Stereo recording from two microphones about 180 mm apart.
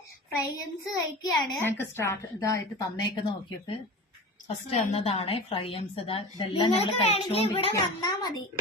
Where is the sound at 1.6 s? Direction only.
15° left (ahead or behind).